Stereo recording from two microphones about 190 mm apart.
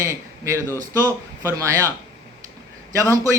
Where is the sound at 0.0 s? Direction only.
15° right (ahead or behind).